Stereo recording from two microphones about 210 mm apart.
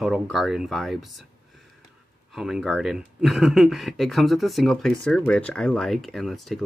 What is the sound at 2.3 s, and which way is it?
Speech, centre (ahead or behind).